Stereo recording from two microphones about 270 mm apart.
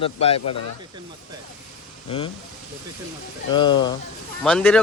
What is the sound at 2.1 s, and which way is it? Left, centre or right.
Speech, centre.